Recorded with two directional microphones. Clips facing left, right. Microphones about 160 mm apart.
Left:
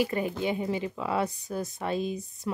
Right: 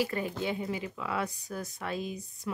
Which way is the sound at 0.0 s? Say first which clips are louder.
Left 4 dB; 20° left (ahead or behind).